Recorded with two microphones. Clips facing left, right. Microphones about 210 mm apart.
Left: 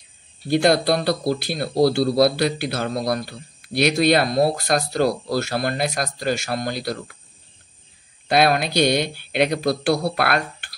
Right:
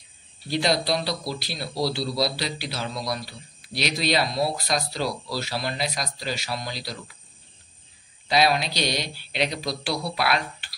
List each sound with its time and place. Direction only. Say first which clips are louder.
0.5 s speech: left 7 dB; 55° left (ahead or behind)
8.3 s speech: left 4 dB; 55° left (ahead or behind)